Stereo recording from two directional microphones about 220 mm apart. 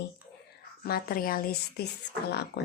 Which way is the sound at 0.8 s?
45° left (ahead or behind).